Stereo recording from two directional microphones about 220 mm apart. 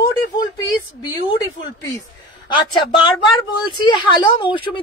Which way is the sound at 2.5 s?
20° left (ahead or behind).